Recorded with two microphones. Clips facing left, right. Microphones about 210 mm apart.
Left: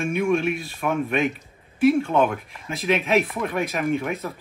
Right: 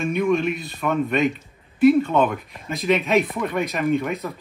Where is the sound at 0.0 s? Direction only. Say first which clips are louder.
Right 1 dB; centre (ahead or behind).